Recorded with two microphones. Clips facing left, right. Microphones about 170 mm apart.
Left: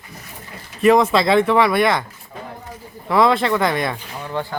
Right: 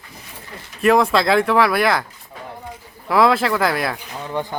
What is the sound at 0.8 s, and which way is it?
A man's voice, centre (ahead or behind).